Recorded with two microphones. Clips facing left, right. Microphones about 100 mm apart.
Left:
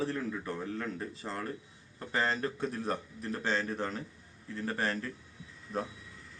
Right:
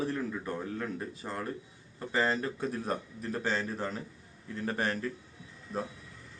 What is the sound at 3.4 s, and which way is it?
Speech, 5° right (ahead or behind).